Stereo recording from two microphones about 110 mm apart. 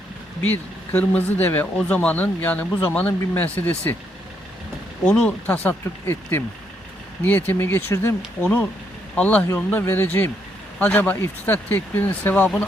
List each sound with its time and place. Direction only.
0.4 s speech: 15° left (ahead or behind)
5.0 s speech: 10° left (ahead or behind)